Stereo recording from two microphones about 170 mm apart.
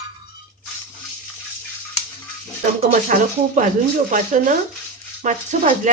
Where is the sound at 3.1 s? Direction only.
50° right (ahead or behind).